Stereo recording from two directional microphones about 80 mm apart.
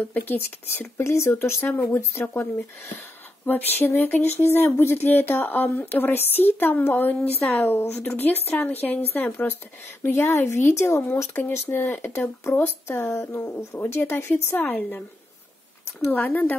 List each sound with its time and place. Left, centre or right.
0.1 s speech: left
3.4 s speech: left
14.6 s speech: centre